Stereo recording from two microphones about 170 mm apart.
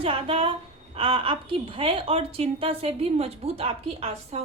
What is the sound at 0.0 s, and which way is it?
A woman's voice, 35° right (ahead or behind).